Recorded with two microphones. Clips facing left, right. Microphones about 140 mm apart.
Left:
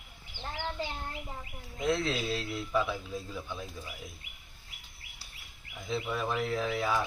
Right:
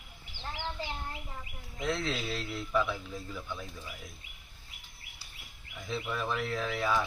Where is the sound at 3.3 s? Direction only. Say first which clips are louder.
Left 1 dB; 15° left (ahead or behind).